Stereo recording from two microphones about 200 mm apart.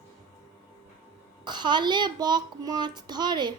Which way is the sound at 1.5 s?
20° right (ahead or behind).